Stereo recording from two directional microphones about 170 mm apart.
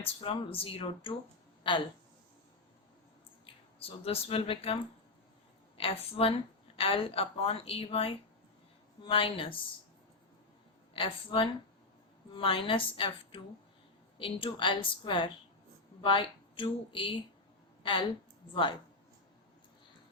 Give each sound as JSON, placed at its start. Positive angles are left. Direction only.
{"t": 0.0, "sound": "a woman's voice", "side_deg": 30}
{"t": 3.8, "sound": "a woman's voice", "side_deg": 35}
{"t": 10.9, "sound": "a woman's voice", "side_deg": 30}
{"t": 18.5, "sound": "speech", "side_deg": 30}